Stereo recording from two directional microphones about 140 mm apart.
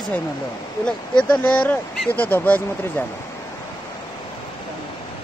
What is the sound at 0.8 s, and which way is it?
Speech, 5° left (ahead or behind).